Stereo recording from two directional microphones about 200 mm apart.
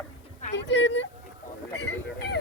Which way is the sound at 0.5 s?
65° left (ahead or behind).